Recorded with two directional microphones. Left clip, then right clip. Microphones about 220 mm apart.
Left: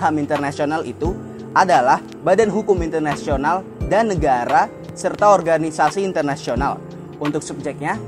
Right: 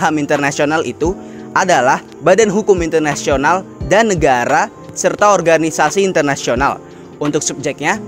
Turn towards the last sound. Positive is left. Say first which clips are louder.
# right 7 dB
turn(degrees=-45)  # may be behind; listen again after turning